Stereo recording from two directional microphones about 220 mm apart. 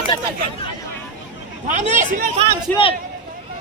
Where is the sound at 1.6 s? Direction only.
35° right (ahead or behind).